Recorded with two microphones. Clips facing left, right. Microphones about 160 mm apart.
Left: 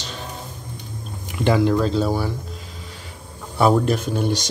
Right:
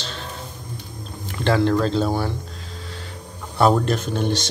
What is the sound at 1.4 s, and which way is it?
Speech, 10° left (ahead or behind).